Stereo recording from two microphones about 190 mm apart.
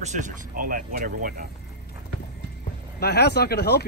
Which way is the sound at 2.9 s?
60° left (ahead or behind).